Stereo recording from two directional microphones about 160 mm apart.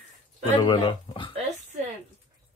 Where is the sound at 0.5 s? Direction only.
30° left (ahead or behind).